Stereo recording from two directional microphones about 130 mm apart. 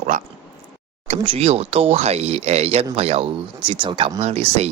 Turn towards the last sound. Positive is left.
turn(degrees=-55)  # may be behind; listen again after turning